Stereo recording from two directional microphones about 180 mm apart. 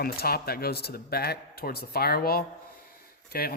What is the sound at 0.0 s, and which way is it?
A man's voice, 60° left (ahead or behind).